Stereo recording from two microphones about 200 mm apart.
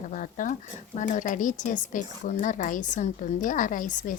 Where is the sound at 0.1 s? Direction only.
40° left (ahead or behind).